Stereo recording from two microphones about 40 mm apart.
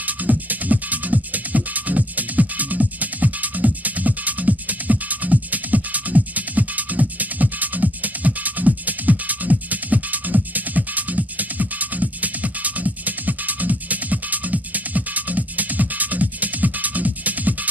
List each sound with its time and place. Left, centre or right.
0.0 s music: right